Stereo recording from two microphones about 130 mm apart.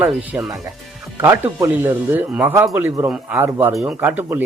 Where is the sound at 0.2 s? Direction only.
10° right (ahead or behind).